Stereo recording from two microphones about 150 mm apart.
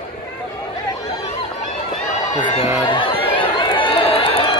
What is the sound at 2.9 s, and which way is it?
Music, 35° left (ahead or behind).